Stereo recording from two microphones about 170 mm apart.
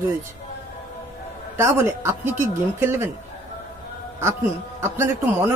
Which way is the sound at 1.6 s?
15° right (ahead or behind).